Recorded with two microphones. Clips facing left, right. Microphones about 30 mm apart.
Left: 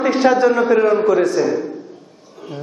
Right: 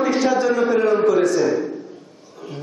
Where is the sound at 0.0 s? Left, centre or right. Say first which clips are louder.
Left 4 dB; left; by 1.7 s centre.